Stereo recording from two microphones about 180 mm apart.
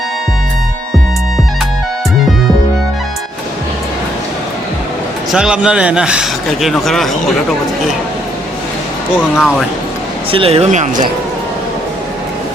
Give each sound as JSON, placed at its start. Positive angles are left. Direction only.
{"t": 5.3, "sound": "a man's voice", "side_deg": -5}
{"t": 9.1, "sound": "a man's voice", "side_deg": 0}
{"t": 10.3, "sound": "speech", "side_deg": -35}